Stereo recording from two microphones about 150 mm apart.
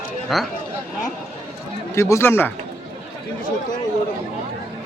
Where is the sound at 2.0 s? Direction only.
20° left (ahead or behind).